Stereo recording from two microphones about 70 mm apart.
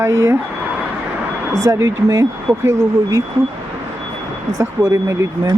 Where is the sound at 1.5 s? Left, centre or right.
Right.